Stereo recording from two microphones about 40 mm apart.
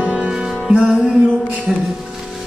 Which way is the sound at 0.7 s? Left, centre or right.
Right.